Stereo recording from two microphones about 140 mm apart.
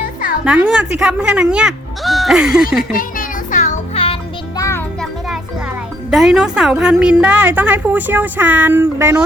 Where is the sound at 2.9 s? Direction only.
75° left (ahead or behind).